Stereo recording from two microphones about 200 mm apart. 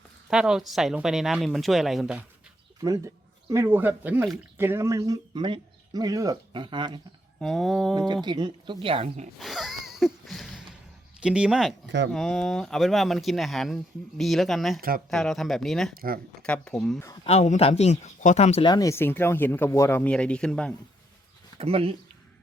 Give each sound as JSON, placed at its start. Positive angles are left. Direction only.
{"t": 0.3, "sound": "speech", "side_deg": -5}
{"t": 2.8, "sound": "speech", "side_deg": -15}
{"t": 7.3, "sound": "speech", "side_deg": 0}
{"t": 7.9, "sound": "speech", "side_deg": -20}
{"t": 9.4, "sound": "a sound", "side_deg": 0}
{"t": 11.2, "sound": "speech", "side_deg": -5}
{"t": 11.9, "sound": "speech", "side_deg": -60}
{"t": 12.1, "sound": "speech", "side_deg": 0}
{"t": 14.8, "sound": "speech", "side_deg": -45}
{"t": 15.1, "sound": "speech", "side_deg": 0}
{"t": 16.0, "sound": "speech", "side_deg": -45}
{"t": 16.4, "sound": "speech", "side_deg": 5}
{"t": 17.2, "sound": "speech", "side_deg": 35}
{"t": 21.6, "sound": "speech", "side_deg": -30}